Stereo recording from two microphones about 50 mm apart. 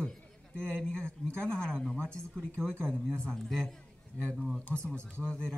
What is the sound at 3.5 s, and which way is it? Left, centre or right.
A man's voice, centre.